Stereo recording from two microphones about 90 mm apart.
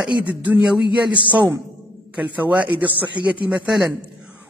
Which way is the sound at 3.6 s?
Centre (ahead or behind).